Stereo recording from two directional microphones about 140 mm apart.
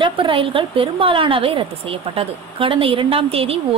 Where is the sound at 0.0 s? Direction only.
40° right (ahead or behind).